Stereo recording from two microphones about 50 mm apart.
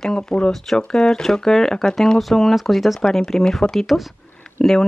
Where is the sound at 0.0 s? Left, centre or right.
Centre.